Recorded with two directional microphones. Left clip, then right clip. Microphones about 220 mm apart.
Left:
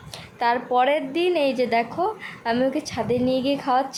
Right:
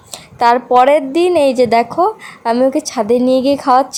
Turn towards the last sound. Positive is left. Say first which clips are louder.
# right 10 dB
turn(degrees=-35)  # may be behind; listen again after turning